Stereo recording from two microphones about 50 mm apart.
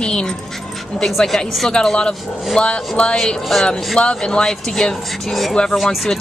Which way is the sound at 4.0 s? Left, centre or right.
Centre.